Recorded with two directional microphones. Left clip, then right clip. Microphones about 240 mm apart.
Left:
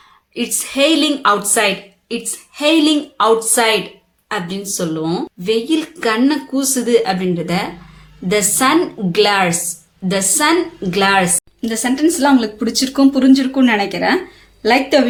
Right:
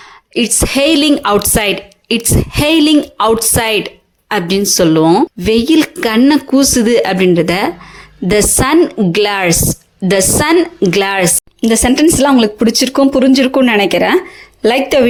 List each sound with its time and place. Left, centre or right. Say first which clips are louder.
0.3 s a woman's voice: right 5 dB; right